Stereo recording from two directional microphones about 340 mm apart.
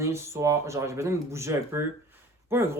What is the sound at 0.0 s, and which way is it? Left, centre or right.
Speech, centre.